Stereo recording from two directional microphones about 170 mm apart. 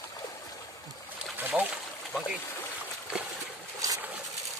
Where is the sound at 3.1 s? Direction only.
5° right (ahead or behind).